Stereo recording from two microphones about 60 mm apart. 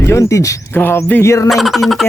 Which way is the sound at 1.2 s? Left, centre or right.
Left.